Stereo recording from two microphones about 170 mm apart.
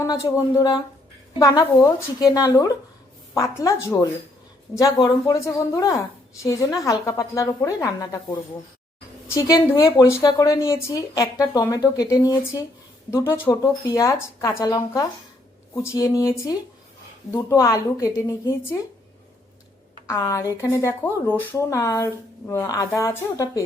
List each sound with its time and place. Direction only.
0.0 s a woman's voice: 20° left (ahead or behind)
9.3 s a woman's voice: 20° left (ahead or behind)
20.1 s speech: 20° left (ahead or behind)